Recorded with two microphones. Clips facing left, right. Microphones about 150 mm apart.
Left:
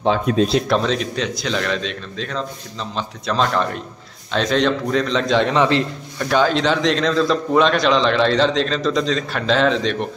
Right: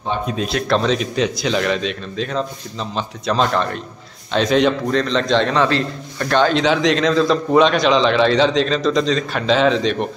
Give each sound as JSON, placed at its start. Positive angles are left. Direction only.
{"t": 0.0, "sound": "speech", "side_deg": 90}
{"t": 0.4, "sound": "speech", "side_deg": 30}
{"t": 0.8, "sound": "a man's voice", "side_deg": -10}
{"t": 4.9, "sound": "a man's voice", "side_deg": 10}
{"t": 5.5, "sound": "a man's voice", "side_deg": 20}
{"t": 6.1, "sound": "a man's voice", "side_deg": 5}